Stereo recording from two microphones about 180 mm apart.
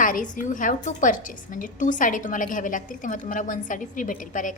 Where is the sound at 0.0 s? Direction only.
45° left (ahead or behind).